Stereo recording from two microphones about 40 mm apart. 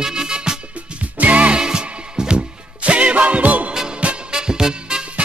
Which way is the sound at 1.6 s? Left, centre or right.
Centre.